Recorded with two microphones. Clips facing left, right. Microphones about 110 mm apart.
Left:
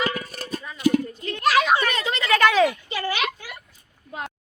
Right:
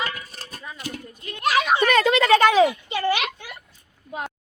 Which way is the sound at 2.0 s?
60° right (ahead or behind).